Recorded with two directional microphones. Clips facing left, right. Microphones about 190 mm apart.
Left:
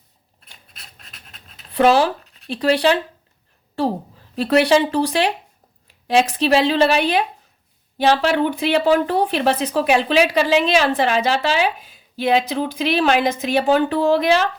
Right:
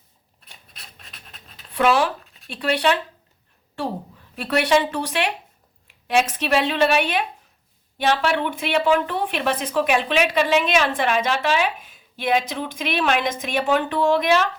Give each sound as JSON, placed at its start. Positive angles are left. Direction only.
{"t": 0.7, "sound": "pant", "side_deg": 0}
{"t": 1.7, "sound": "speech", "side_deg": 35}
{"t": 4.4, "sound": "speech", "side_deg": 35}